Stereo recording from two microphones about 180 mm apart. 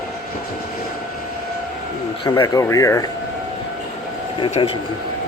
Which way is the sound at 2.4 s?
15° left (ahead or behind).